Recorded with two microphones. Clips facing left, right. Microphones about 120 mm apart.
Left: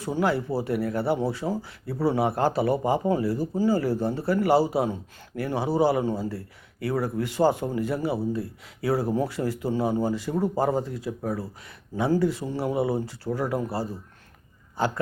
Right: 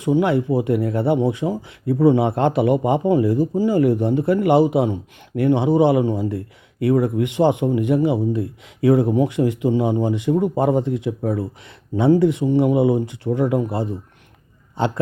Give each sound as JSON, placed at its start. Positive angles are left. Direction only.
{"t": 0.0, "sound": "speech", "side_deg": -20}